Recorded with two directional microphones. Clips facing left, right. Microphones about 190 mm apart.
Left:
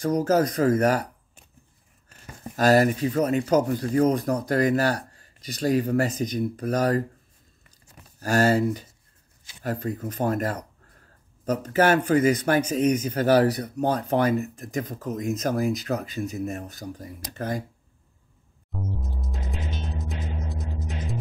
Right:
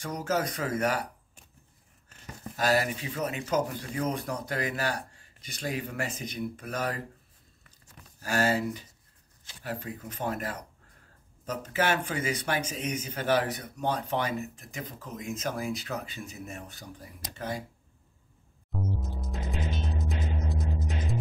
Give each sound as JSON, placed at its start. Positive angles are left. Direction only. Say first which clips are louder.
{"t": 0.0, "sound": "speech", "louder": "left 9 dB", "side_deg": 40}
{"t": 2.5, "sound": "speech", "louder": "left 8 dB", "side_deg": 40}
{"t": 8.2, "sound": "speech", "louder": "left 7 dB", "side_deg": 40}
{"t": 18.7, "sound": "music", "louder": "even", "side_deg": 0}